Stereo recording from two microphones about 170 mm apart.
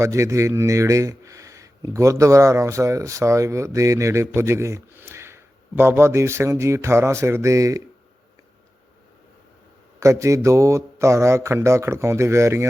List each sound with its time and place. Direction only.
0.0 s speech: 15° right (ahead or behind)
10.0 s speech: 15° right (ahead or behind)